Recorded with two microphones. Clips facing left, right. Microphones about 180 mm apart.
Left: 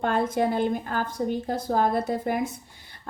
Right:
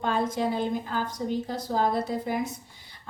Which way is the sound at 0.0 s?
55° left (ahead or behind).